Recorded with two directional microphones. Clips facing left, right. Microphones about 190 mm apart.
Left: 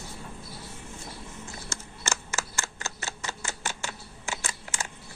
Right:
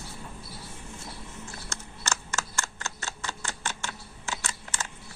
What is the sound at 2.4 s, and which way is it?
Typewriter, 5° left (ahead or behind).